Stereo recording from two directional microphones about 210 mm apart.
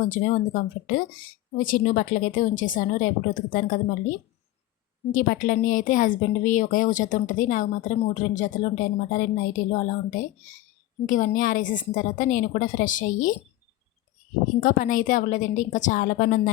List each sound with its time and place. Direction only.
0.0 s speech: 40° left (ahead or behind)
5.1 s speech: 40° left (ahead or behind)
14.6 s speech: 40° left (ahead or behind)